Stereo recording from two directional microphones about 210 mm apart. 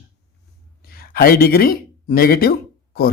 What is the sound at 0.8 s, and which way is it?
Speech, 45° left (ahead or behind).